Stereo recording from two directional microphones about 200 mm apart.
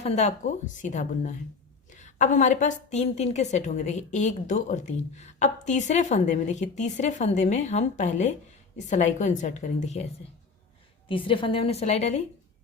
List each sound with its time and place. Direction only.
0.0 s a woman's voice: 35° left (ahead or behind)
11.1 s a woman's voice: 25° left (ahead or behind)